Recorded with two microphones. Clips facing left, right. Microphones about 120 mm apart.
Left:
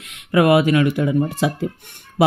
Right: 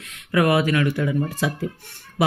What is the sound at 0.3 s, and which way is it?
Speech, 25° left (ahead or behind).